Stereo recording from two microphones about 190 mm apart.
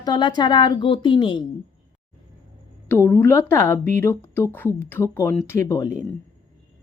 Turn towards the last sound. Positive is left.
turn(degrees=15)  # may be behind; listen again after turning